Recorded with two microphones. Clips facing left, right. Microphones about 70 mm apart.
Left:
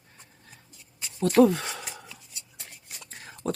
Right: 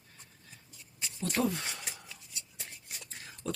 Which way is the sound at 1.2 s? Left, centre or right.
Left.